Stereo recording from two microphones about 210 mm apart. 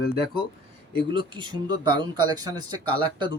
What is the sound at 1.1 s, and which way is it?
Speech, 20° right (ahead or behind).